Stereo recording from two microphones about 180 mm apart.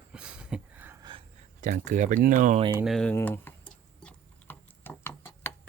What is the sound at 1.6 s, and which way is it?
Speech, 45° right (ahead or behind).